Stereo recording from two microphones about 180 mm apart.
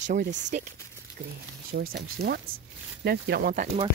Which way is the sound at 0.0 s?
45° right (ahead or behind).